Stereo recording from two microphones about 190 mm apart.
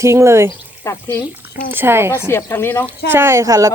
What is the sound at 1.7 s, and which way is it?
Speech, 10° right (ahead or behind).